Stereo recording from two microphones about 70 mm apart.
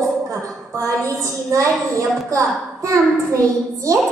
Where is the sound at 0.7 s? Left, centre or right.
Right.